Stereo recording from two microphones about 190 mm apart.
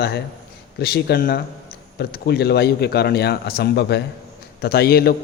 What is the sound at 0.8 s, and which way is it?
A man's voice, 55° left (ahead or behind).